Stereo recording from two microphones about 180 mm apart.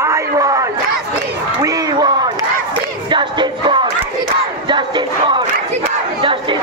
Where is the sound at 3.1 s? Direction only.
25° right (ahead or behind).